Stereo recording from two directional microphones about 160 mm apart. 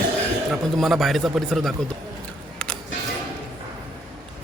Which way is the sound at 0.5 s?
Centre (ahead or behind).